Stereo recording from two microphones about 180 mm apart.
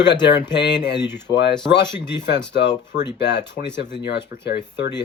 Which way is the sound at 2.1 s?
75° left (ahead or behind).